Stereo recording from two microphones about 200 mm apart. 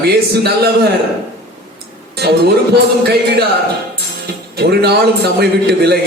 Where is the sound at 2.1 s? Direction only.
55° right (ahead or behind).